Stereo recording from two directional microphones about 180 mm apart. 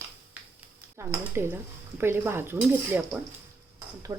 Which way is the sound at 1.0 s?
15° right (ahead or behind).